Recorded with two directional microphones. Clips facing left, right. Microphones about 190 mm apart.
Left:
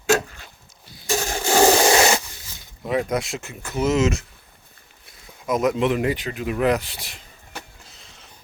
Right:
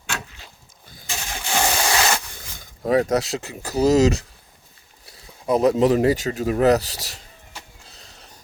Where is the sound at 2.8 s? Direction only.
40° right (ahead or behind).